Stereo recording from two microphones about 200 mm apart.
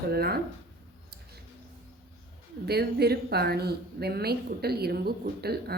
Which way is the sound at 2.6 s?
55° right (ahead or behind).